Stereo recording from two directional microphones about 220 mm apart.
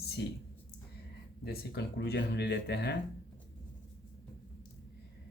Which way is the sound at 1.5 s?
50° left (ahead or behind).